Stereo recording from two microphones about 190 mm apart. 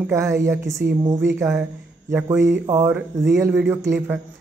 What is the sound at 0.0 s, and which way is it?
Speech, 15° right (ahead or behind).